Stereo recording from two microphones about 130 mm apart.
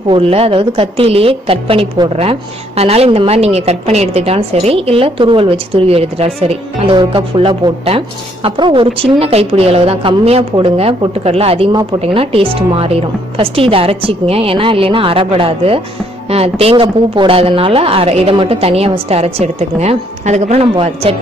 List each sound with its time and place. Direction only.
0.1 s a woman's voice: 45° right (ahead or behind)
20.7 s a woman's voice: 45° right (ahead or behind)